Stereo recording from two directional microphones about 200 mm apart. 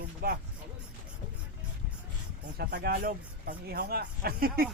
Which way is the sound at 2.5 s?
50° right (ahead or behind).